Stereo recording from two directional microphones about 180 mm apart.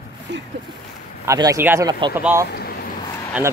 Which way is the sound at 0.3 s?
75° right (ahead or behind).